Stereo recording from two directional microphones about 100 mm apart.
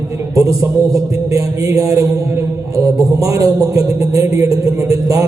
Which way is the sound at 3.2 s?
30° right (ahead or behind).